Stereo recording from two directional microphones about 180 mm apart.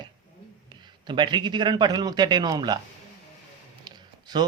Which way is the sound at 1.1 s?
25° right (ahead or behind).